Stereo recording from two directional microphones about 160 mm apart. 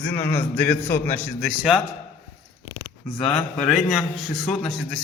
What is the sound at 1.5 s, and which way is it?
Speech, centre (ahead or behind).